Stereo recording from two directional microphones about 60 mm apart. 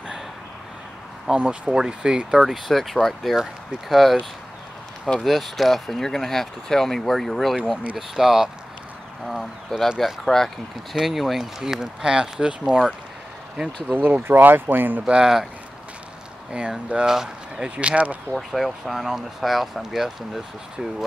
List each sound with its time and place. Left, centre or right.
1.2 s speech: centre
2.4 s speech: centre
13.9 s speech: right
15.0 s speech: centre
16.5 s speech: centre
17.6 s speech: right
18.3 s speech: centre